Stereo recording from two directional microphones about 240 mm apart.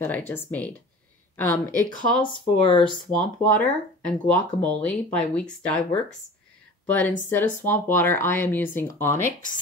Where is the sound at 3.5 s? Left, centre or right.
Centre.